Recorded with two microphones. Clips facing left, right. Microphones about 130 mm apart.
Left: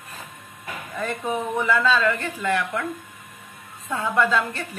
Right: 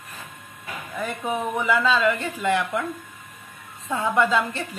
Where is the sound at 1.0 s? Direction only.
15° right (ahead or behind).